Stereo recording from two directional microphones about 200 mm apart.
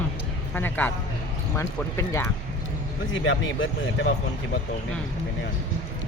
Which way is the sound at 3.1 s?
70° left (ahead or behind).